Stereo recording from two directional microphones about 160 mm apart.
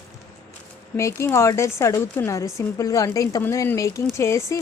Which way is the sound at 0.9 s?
15° left (ahead or behind).